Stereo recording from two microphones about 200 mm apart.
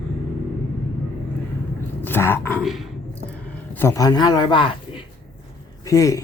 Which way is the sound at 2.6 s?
Centre (ahead or behind).